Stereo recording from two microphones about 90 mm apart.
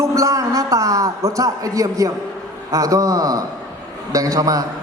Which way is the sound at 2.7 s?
40° right (ahead or behind).